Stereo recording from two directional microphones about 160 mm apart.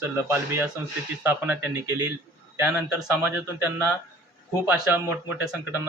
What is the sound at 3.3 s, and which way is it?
Speech, 10° right (ahead or behind).